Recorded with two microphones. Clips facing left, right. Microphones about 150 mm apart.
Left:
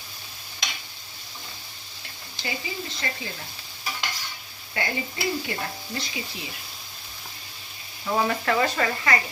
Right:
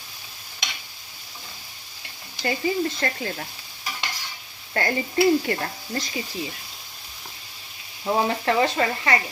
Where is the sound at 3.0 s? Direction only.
55° right (ahead or behind).